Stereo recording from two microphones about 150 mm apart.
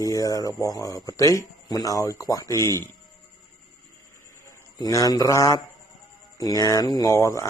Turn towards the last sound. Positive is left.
turn(degrees=20)  # may be behind; listen again after turning